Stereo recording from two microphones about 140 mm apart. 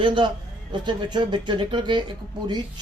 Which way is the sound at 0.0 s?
35° right (ahead or behind).